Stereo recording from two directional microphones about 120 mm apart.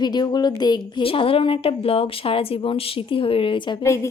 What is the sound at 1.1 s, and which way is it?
A woman's voice, 50° left (ahead or behind).